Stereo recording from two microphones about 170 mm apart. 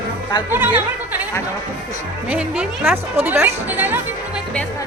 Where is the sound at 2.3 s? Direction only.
10° right (ahead or behind).